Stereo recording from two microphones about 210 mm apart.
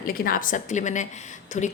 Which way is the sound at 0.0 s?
45° left (ahead or behind).